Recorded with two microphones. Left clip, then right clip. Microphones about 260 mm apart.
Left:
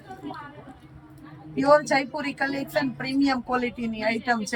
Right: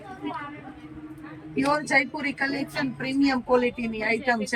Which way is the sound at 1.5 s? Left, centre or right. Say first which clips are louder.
Left 3 dB; centre.